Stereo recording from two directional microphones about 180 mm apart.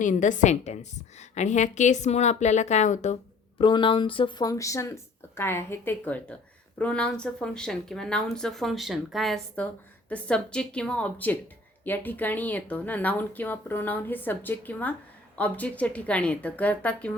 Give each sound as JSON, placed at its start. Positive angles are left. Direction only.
{"t": 0.0, "sound": "a woman's voice", "side_deg": 45}
{"t": 3.6, "sound": "speech", "side_deg": 25}